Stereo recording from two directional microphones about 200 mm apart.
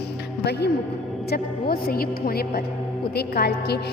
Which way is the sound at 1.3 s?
50° left (ahead or behind).